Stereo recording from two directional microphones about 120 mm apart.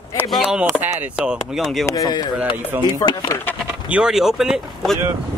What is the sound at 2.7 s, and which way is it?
Speech, 20° right (ahead or behind).